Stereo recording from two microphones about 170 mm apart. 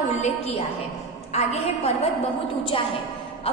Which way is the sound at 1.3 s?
40° left (ahead or behind).